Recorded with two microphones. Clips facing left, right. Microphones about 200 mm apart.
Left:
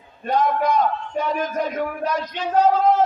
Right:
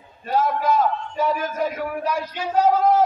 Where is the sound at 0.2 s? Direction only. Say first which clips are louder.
Left 2 dB; 5° right (ahead or behind).